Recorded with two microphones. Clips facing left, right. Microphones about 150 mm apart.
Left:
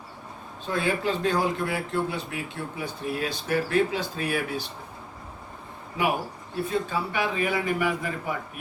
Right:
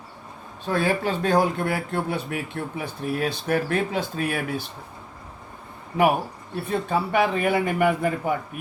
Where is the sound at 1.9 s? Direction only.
60° right (ahead or behind).